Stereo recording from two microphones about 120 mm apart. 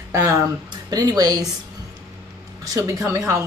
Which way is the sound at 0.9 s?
30° right (ahead or behind).